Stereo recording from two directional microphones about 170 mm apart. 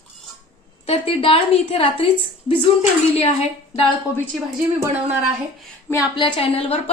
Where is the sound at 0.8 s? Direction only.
35° left (ahead or behind).